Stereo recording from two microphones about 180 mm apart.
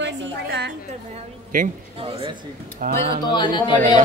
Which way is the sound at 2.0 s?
30° right (ahead or behind).